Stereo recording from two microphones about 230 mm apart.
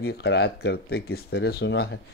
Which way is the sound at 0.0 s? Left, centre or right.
Left.